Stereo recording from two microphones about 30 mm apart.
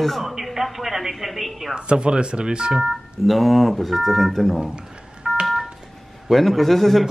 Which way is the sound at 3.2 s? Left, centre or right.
Centre.